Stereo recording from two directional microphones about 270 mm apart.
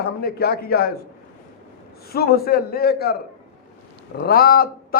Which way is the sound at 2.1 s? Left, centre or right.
Left.